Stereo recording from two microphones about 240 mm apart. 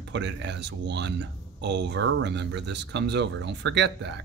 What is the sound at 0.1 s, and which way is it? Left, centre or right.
Speech, right.